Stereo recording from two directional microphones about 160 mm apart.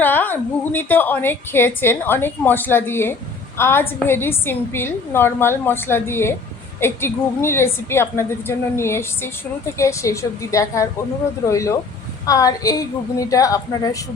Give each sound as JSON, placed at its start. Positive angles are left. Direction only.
{"t": 0.0, "sound": "a woman's voice", "side_deg": 10}